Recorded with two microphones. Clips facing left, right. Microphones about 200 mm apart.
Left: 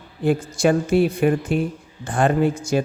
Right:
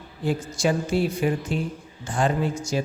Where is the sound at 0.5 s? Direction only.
55° left (ahead or behind).